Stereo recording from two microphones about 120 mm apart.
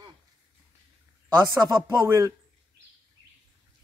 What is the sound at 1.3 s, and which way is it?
Speech, 30° right (ahead or behind).